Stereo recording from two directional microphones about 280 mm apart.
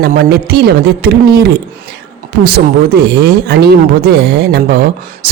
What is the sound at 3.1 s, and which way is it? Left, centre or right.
Speech, right.